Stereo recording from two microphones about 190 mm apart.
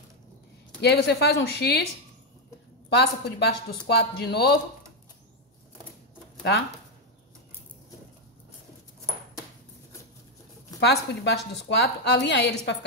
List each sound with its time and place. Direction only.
0.7 s a woman's voice: 60° left (ahead or behind)
2.9 s a woman's voice: 65° left (ahead or behind)
10.8 s a woman's voice: 65° left (ahead or behind)